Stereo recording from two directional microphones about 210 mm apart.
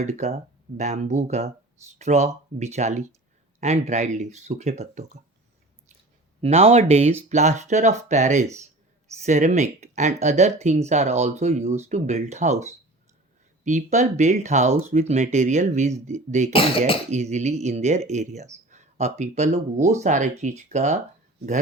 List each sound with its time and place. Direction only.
0.0 s speech: 30° right (ahead or behind)
6.4 s speech: 30° right (ahead or behind)
16.5 s speech: 25° left (ahead or behind)
17.1 s speech: 35° right (ahead or behind)